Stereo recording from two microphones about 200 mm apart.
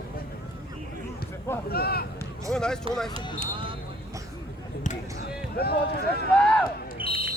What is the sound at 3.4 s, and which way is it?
Basketball bounce, 25° right (ahead or behind).